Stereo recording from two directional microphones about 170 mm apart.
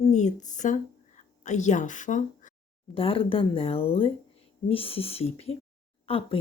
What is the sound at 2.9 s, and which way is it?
A woman's voice, 30° left (ahead or behind).